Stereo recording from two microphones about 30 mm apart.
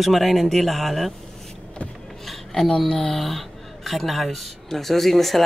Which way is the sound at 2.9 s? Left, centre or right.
Centre.